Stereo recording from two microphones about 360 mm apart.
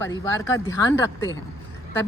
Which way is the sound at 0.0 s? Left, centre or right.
Centre.